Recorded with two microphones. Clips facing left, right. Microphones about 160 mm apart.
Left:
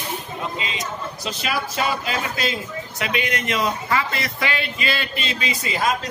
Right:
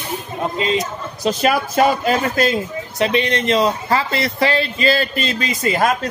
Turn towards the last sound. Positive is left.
turn(degrees=-50)  # may be behind; listen again after turning